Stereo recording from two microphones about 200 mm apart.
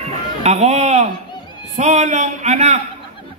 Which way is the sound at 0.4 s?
35° right (ahead or behind).